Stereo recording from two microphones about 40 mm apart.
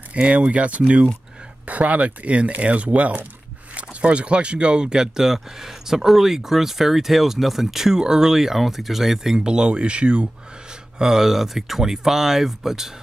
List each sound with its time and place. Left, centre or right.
0.1 s speech: right
11.0 s speech: centre